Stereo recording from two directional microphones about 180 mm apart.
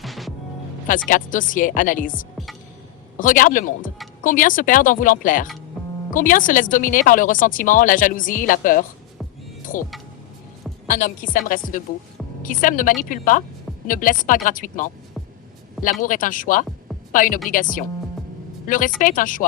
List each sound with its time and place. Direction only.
0.0 s music: centre (ahead or behind)
0.9 s a woman's voice: 50° left (ahead or behind)